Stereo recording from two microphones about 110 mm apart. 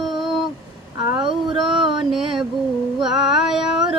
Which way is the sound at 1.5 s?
Centre (ahead or behind).